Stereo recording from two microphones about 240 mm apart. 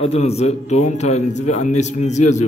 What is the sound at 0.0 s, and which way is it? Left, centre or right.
A man's voice, left.